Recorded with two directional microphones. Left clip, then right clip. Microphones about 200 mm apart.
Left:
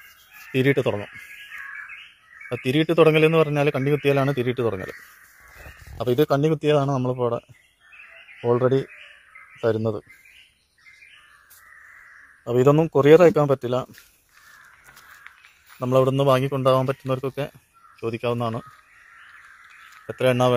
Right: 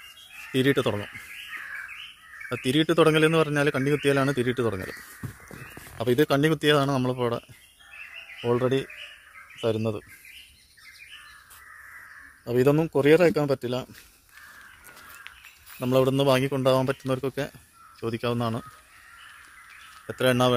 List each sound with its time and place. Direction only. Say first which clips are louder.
0.5 s a man's voice: left 3 dB; 10° right (ahead or behind)
2.5 s a man's voice: left 2 dB; 10° right (ahead or behind)
5.9 s a man's voice: left 2 dB; 15° right (ahead or behind)
8.4 s a man's voice: left 4 dB; 5° left (ahead or behind)
12.4 s a man's voice: left 4 dB; centre (ahead or behind)
15.8 s a man's voice: left 3 dB; 15° right (ahead or behind)
20.1 s a man's voice: left 3 dB; 10° right (ahead or behind)